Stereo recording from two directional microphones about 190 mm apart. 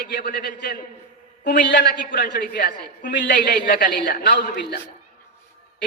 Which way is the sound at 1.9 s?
50° left (ahead or behind).